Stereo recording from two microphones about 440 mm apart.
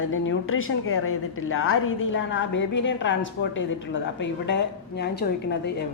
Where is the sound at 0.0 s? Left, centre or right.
Left.